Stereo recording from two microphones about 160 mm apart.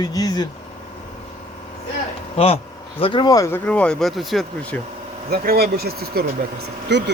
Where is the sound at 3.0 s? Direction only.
30° left (ahead or behind).